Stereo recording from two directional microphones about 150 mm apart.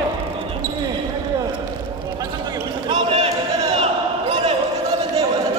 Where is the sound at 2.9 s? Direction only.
40° right (ahead or behind).